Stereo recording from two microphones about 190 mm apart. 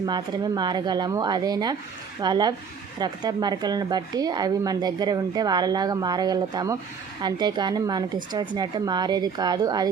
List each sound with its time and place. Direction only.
0.0 s speech: 20° right (ahead or behind)